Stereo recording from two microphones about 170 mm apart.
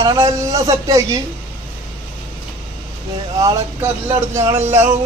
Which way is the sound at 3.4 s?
20° right (ahead or behind).